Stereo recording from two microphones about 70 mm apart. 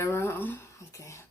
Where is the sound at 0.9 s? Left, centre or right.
Left.